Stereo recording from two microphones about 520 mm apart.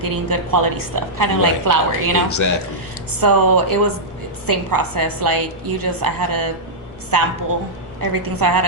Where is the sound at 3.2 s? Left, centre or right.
Right.